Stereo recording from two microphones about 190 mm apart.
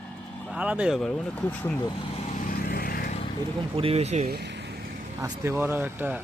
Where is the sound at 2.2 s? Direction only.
45° left (ahead or behind).